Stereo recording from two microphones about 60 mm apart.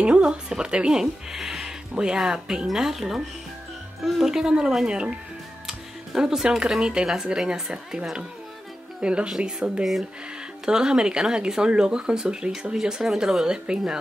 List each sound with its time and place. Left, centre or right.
0.0 s speech: centre